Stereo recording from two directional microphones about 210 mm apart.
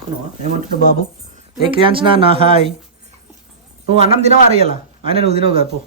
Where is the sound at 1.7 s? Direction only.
25° right (ahead or behind).